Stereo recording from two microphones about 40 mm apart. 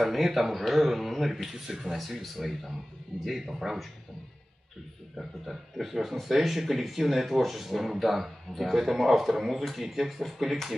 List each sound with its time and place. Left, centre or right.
0.0 s speech: centre
5.1 s speech: centre